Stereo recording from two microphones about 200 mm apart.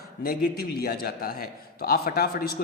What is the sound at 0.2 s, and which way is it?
A man's voice, 50° left (ahead or behind).